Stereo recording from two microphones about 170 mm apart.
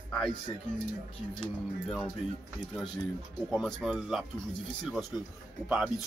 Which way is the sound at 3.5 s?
Centre (ahead or behind).